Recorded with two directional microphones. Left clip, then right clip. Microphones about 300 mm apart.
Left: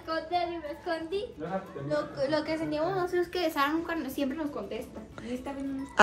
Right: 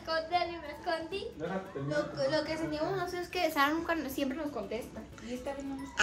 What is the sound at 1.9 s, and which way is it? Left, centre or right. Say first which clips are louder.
Speech: left 2 dB; left.